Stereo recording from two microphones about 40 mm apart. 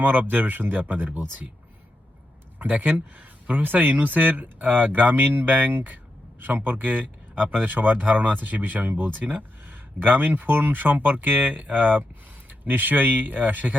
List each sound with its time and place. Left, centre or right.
0.0 s speech: right
2.6 s speech: right